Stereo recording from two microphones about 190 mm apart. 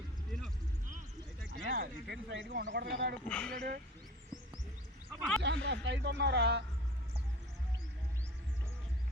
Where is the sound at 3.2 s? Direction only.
5° left (ahead or behind).